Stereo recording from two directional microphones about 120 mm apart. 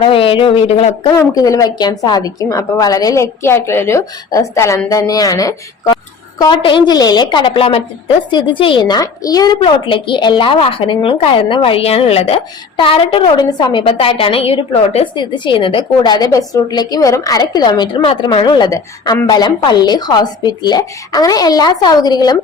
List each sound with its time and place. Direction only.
0.0 s a woman's voice: 50° left (ahead or behind)
1.0 s speech: 30° left (ahead or behind)
6.4 s a woman's voice: 40° left (ahead or behind)
9.6 s a woman's voice: 45° left (ahead or behind)
13.4 s a woman's voice: 35° left (ahead or behind)